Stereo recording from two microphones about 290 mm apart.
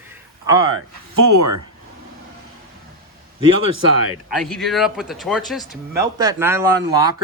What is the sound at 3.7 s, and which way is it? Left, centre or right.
Speech, right.